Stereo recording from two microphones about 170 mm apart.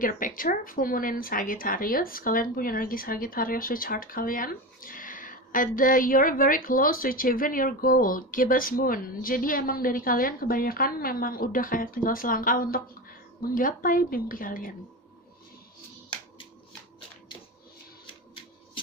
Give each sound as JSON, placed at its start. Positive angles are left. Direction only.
{"t": 0.0, "sound": "speech", "side_deg": 55}